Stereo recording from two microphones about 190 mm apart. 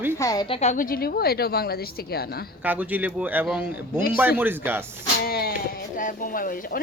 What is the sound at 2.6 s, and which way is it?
Speech, 10° right (ahead or behind).